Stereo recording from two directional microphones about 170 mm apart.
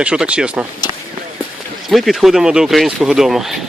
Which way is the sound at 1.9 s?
Centre (ahead or behind).